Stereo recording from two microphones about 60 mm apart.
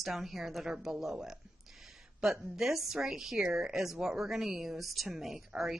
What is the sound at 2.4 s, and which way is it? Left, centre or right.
A woman's voice, centre.